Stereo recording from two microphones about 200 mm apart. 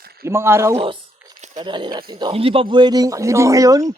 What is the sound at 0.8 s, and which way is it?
Crumpling, 25° right (ahead or behind).